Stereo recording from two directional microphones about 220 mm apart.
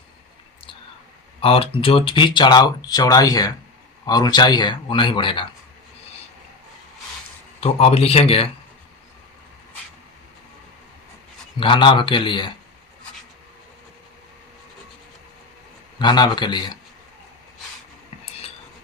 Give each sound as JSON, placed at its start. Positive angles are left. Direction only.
{"t": 1.4, "sound": "speech", "side_deg": 25}
{"t": 7.6, "sound": "speech", "side_deg": 25}
{"t": 11.6, "sound": "speech", "side_deg": 20}
{"t": 16.0, "sound": "speech", "side_deg": 20}